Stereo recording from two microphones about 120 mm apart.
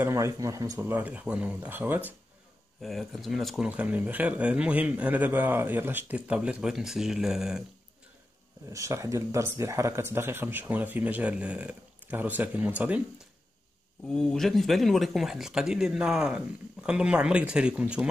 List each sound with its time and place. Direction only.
0.0 s speech: 25° right (ahead or behind)
2.8 s speech: centre (ahead or behind)
8.6 s speech: 25° right (ahead or behind)
14.0 s speech: 5° left (ahead or behind)